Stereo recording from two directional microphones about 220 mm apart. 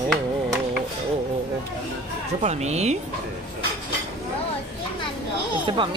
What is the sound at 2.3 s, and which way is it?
Speech, 30° right (ahead or behind).